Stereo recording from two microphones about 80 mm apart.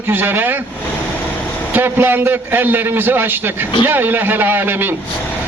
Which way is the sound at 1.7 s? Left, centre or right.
Right.